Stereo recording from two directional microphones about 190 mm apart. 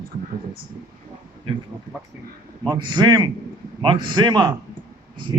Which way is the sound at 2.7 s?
25° right (ahead or behind).